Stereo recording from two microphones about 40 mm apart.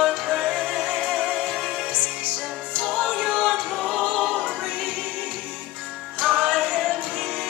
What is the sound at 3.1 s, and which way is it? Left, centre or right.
Music, centre.